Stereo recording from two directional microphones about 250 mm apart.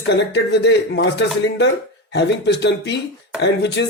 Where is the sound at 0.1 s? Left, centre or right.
Left.